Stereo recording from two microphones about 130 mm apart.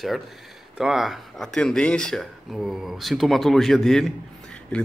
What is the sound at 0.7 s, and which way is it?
Speech, 5° right (ahead or behind).